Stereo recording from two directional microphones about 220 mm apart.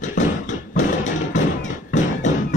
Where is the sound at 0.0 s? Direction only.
35° left (ahead or behind).